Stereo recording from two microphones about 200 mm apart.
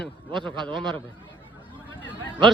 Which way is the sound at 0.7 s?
25° right (ahead or behind).